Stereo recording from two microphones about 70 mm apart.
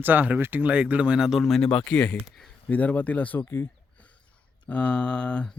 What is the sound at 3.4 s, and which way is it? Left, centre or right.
Speech, left.